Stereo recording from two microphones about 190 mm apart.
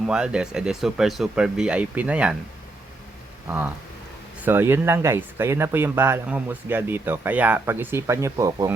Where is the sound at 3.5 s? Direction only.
10° right (ahead or behind).